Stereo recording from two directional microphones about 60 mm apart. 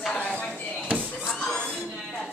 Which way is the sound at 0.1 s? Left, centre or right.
Centre.